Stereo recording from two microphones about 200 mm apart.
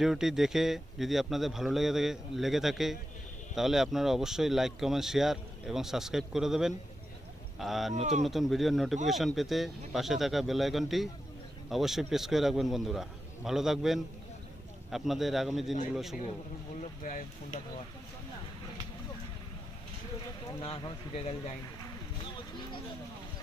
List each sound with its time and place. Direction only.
0.0 s speech: centre (ahead or behind)
7.9 s speech: 35° right (ahead or behind)
8.3 s speech: centre (ahead or behind)
17.0 s speech: 40° left (ahead or behind)
20.4 s speech: 25° left (ahead or behind)